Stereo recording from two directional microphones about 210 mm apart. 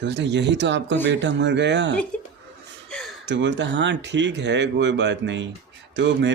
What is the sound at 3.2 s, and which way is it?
Speech, 60° right (ahead or behind).